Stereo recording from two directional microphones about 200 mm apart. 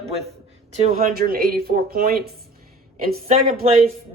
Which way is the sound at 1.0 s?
45° right (ahead or behind).